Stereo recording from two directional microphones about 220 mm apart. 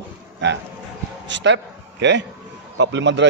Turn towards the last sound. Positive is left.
turn(degrees=-55)  # may be behind; listen again after turning